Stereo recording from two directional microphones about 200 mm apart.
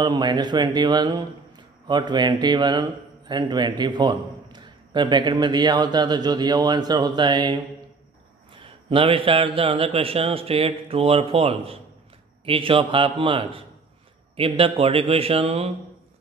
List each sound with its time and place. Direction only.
0.0 s speech: 20° right (ahead or behind)